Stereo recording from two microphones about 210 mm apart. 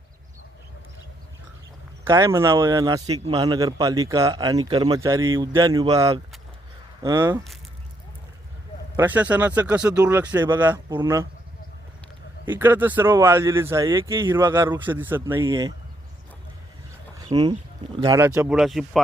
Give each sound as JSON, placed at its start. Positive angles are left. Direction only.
{"t": 2.0, "sound": "speech", "side_deg": -15}
{"t": 9.0, "sound": "speech", "side_deg": -10}
{"t": 12.5, "sound": "speech", "side_deg": -10}
{"t": 17.2, "sound": "speech", "side_deg": -20}